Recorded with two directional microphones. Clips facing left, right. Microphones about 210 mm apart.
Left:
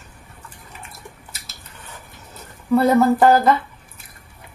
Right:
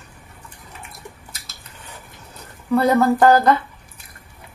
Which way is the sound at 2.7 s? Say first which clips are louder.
Left 1 dB; 5° left (ahead or behind).